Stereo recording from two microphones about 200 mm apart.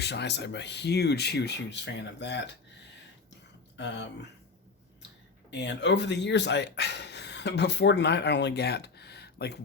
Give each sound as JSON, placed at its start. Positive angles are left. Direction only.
{"t": 0.0, "sound": "speech", "side_deg": 60}
{"t": 3.8, "sound": "speech", "side_deg": 60}
{"t": 5.5, "sound": "speech", "side_deg": 60}